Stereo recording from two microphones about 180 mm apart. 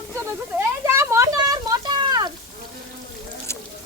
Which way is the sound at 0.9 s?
15° right (ahead or behind).